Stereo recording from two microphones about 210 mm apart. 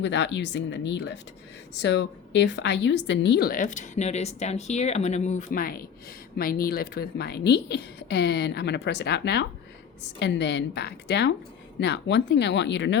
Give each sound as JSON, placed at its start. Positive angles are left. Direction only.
{"t": 0.0, "sound": "a woman's voice", "side_deg": 55}